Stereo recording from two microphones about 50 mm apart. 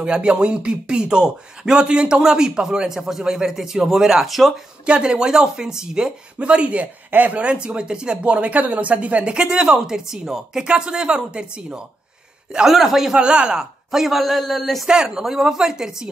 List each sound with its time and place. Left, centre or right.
0.0 s speech: centre
4.8 s speech: right
7.6 s speech: centre
12.6 s a man's voice: centre
13.2 s speech: right
13.6 s a man's voice: centre
14.9 s speech: centre